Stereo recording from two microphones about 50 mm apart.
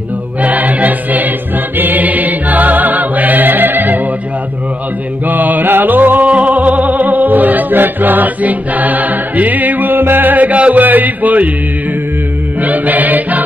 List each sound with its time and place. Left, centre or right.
0.4 s choir: right
1.8 s music: right
5.2 s music: right
12.6 s music: right